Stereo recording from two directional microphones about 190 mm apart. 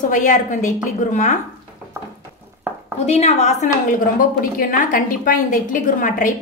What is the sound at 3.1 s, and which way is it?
A woman's voice, 35° left (ahead or behind).